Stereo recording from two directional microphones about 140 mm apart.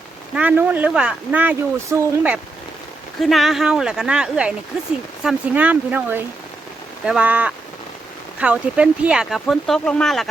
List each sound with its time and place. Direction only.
0.3 s speech: 10° right (ahead or behind)
3.2 s speech: centre (ahead or behind)